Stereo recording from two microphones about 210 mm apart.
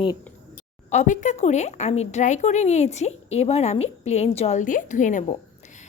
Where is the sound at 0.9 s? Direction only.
35° left (ahead or behind).